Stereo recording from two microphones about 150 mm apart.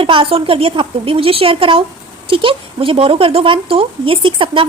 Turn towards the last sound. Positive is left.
turn(degrees=-35)  # may be behind; listen again after turning